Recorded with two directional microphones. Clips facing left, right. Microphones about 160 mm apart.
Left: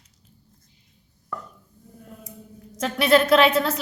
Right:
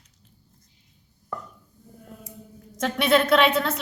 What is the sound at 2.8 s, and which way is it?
A woman's voice, centre (ahead or behind).